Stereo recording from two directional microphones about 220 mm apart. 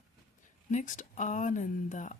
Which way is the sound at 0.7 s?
35° left (ahead or behind).